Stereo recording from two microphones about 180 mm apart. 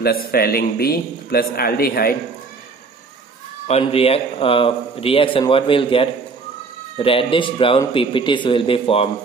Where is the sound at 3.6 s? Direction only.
35° left (ahead or behind).